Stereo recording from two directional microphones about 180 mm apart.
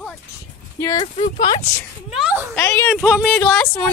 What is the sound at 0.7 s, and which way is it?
Speech, 15° left (ahead or behind).